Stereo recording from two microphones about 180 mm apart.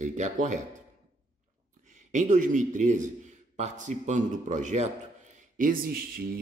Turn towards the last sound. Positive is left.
turn(degrees=-55)  # may be behind; listen again after turning